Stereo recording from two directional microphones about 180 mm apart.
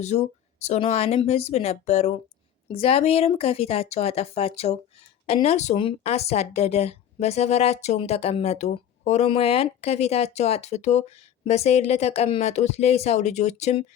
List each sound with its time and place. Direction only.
0.0 s speech: 40° left (ahead or behind)